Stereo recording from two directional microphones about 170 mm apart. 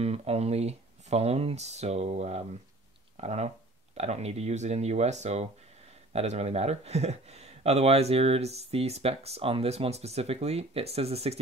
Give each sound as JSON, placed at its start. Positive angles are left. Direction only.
{"t": 0.0, "sound": "speech", "side_deg": -35}